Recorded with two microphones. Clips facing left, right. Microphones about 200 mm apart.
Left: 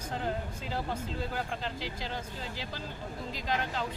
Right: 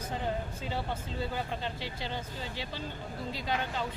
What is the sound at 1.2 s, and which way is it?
Speech, centre (ahead or behind).